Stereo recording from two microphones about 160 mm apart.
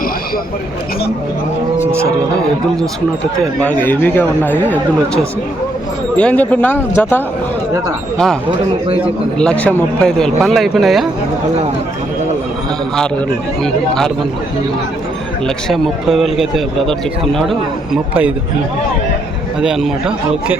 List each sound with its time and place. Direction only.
1.8 s speech: 15° right (ahead or behind)
3.6 s speech: 10° left (ahead or behind)
6.1 s speech: 10° left (ahead or behind)
9.4 s a man's voice: 5° left (ahead or behind)
13.6 s a man's voice: 5° left (ahead or behind)
15.4 s a man's voice: centre (ahead or behind)
19.6 s a man's voice: 5° right (ahead or behind)